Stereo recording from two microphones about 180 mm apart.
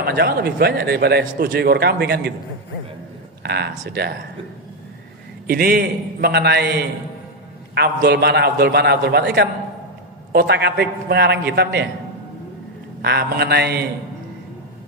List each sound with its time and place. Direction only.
0.0 s speech: 60° right (ahead or behind)
3.4 s speech: 65° right (ahead or behind)
5.5 s speech: 55° right (ahead or behind)
7.8 s speech: 65° right (ahead or behind)
13.0 s speech: 65° right (ahead or behind)